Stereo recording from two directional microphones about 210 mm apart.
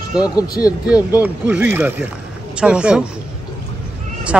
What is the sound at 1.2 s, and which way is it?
Speech, 10° right (ahead or behind).